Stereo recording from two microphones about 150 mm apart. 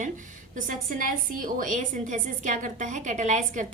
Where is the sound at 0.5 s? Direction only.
65° right (ahead or behind).